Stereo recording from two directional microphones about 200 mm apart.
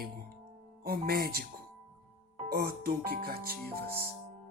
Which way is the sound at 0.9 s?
50° right (ahead or behind).